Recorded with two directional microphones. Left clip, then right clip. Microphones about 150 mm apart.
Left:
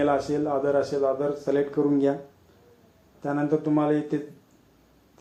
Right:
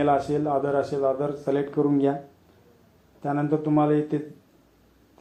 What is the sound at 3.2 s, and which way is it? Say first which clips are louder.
Speech: even; 25° right (ahead or behind).